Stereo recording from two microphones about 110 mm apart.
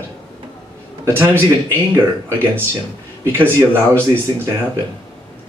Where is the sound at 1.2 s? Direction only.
20° right (ahead or behind).